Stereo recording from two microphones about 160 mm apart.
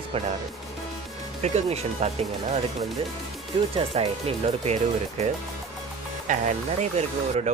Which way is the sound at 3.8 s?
40° right (ahead or behind).